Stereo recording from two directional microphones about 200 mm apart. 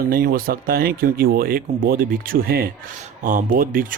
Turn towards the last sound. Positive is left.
turn(degrees=-45)  # may be behind; listen again after turning